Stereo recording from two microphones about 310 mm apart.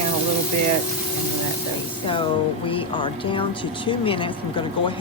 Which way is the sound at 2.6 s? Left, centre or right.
Centre.